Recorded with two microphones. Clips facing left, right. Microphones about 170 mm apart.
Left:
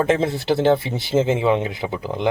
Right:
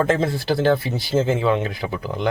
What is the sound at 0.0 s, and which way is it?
Speech, 20° left (ahead or behind).